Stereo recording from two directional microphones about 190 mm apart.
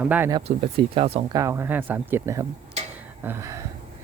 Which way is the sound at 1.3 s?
15° right (ahead or behind).